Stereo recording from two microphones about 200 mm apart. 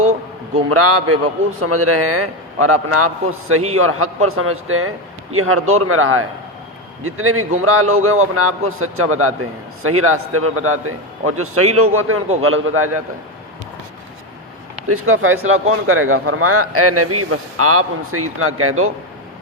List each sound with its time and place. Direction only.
0.7 s a man's voice: 90° right
14.8 s a man's voice: 90° right